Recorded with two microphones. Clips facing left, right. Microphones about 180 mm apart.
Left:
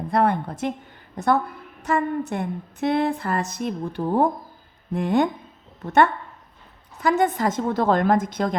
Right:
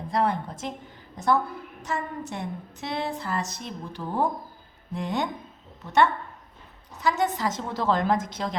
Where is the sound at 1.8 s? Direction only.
55° left (ahead or behind).